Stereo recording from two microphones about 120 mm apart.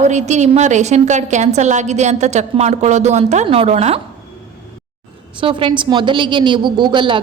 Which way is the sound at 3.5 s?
55° right (ahead or behind).